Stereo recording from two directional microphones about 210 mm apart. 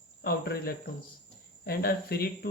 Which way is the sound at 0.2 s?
50° left (ahead or behind).